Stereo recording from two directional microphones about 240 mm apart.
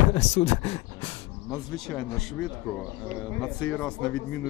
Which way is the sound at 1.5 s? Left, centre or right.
Centre.